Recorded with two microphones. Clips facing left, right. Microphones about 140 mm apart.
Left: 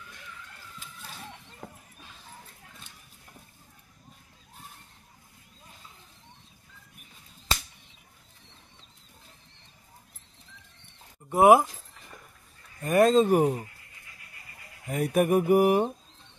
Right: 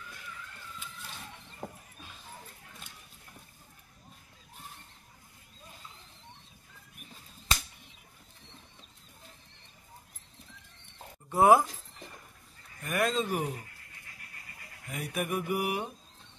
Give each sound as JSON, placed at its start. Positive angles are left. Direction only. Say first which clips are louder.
{"t": 11.2, "sound": "speech", "louder": "left 4 dB", "side_deg": 20}
{"t": 12.8, "sound": "speech", "louder": "left 10 dB", "side_deg": 35}
{"t": 14.9, "sound": "mantra", "louder": "left 10 dB", "side_deg": 45}